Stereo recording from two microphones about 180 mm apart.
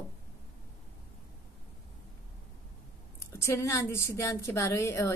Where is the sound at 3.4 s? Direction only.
15° left (ahead or behind).